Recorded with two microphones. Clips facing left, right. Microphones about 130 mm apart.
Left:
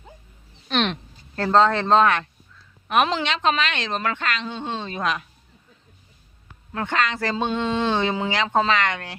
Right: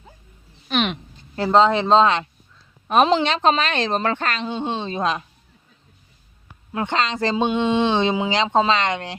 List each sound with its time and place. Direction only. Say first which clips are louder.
0.7 s a sound: right 1 dB; 5° right (ahead or behind)
1.5 s a woman's voice: right 2 dB; 15° right (ahead or behind)
6.7 s a woman's voice: right 2 dB; 25° right (ahead or behind)